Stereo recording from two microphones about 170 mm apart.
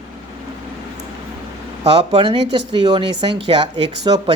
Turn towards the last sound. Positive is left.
turn(degrees=-25)  # may be behind; listen again after turning